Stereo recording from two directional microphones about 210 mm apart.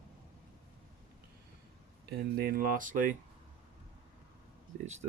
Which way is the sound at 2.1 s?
50° right (ahead or behind).